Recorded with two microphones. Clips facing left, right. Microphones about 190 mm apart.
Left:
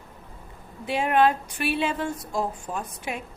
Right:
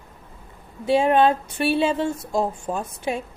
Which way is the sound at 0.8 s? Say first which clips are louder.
Right 4 dB; 30° right (ahead or behind).